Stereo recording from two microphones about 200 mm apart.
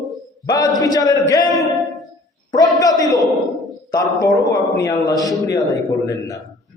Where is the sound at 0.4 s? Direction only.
20° left (ahead or behind).